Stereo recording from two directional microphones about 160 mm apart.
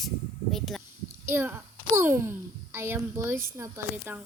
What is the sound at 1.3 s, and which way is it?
A child's voice, 15° right (ahead or behind).